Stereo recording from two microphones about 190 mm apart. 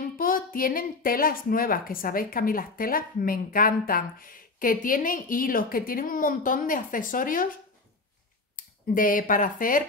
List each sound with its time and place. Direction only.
0.0 s speech: 50° left (ahead or behind)
8.5 s speech: 45° left (ahead or behind)